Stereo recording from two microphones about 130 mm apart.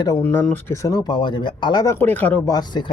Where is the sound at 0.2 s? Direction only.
15° left (ahead or behind).